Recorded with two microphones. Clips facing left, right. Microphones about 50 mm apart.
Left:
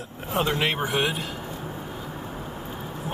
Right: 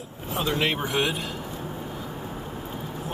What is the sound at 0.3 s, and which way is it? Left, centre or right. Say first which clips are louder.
Speech: left 2 dB; left.